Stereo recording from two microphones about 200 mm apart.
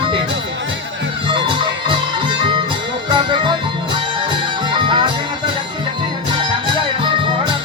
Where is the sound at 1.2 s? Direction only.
25° right (ahead or behind).